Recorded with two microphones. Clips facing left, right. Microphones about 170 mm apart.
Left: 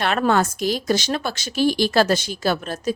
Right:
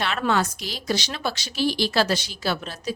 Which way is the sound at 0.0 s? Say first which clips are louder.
Left 4 dB; 50° left (ahead or behind).